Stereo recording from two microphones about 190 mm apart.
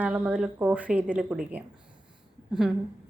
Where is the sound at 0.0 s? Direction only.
5° right (ahead or behind).